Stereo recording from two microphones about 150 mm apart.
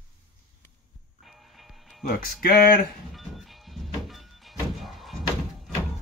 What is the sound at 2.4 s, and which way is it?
Speech, 90° left.